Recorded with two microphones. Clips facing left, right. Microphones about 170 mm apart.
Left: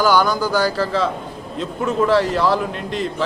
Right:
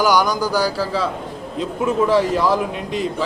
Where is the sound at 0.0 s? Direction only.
15° right (ahead or behind).